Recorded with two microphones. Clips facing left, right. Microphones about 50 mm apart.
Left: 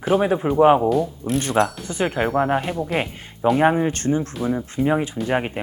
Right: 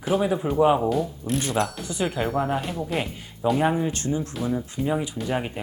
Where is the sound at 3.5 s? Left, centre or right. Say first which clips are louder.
Left 6 dB; left.